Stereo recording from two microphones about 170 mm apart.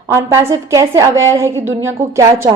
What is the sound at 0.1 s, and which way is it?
A woman's voice, 15° right (ahead or behind).